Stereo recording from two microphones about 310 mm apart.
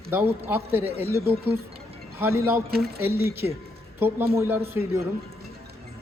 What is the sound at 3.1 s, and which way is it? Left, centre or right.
Speech, right.